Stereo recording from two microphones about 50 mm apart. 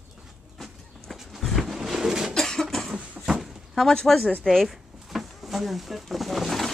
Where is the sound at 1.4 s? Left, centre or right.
Centre.